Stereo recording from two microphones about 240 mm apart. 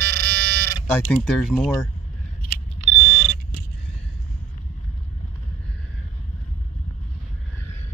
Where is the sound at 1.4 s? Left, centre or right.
Centre.